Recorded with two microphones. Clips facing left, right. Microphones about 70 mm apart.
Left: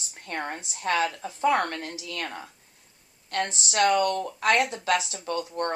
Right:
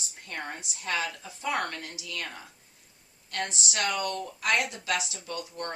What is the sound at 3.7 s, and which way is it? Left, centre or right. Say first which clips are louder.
A woman's voice: left 10 dB; left.